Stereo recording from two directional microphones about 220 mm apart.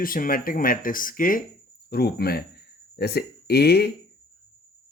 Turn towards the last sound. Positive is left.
turn(degrees=45)  # may be behind; listen again after turning